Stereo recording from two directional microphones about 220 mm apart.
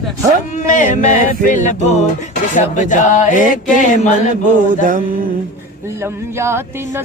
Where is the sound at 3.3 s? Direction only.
35° right (ahead or behind).